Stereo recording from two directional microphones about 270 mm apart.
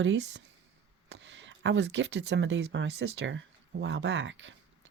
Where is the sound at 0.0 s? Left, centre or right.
Right.